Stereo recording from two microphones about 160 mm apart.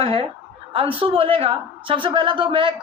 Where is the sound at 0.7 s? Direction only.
35° right (ahead or behind).